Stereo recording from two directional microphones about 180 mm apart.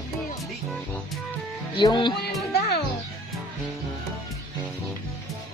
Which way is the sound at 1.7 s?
25° left (ahead or behind).